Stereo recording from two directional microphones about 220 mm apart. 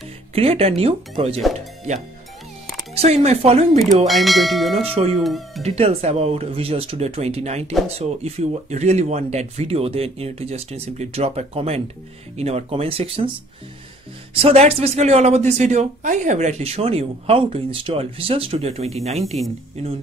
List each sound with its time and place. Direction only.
0.3 s speech: 25° right (ahead or behind)
2.9 s speech: 30° right (ahead or behind)
4.1 s speech: centre (ahead or behind)
5.6 s speech: 30° right (ahead or behind)
14.3 s speech: 30° right (ahead or behind)